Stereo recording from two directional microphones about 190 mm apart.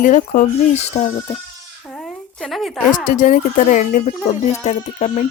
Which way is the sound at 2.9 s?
40° left (ahead or behind).